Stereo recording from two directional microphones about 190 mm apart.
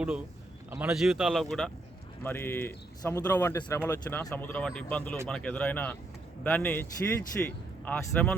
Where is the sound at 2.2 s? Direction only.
10° left (ahead or behind).